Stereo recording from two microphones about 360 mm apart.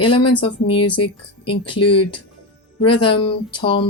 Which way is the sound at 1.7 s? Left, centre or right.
Left.